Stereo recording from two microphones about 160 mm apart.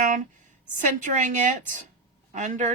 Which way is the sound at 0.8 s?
50° right (ahead or behind).